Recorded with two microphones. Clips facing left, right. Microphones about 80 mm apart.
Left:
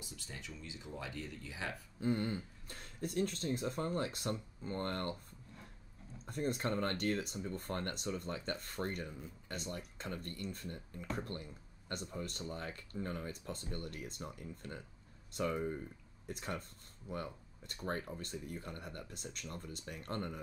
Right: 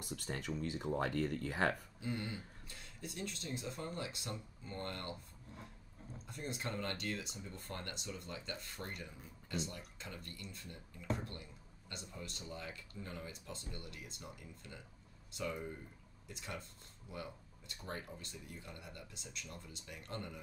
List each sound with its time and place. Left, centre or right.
0.0 s speech: right
2.0 s speech: left
6.2 s speech: left